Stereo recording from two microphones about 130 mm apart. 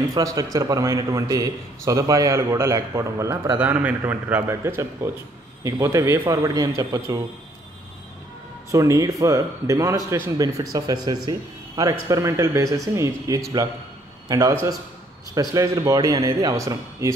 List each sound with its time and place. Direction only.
0.1 s a man's voice: 25° right (ahead or behind)
8.7 s a man's voice: 25° right (ahead or behind)